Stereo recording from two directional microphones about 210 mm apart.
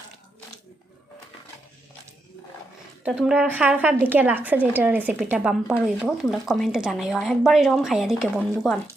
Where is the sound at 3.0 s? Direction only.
5° right (ahead or behind).